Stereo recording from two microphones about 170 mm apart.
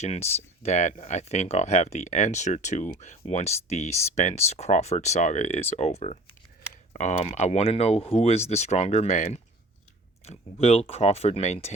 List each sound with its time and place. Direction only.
0.0 s speech: 40° left (ahead or behind)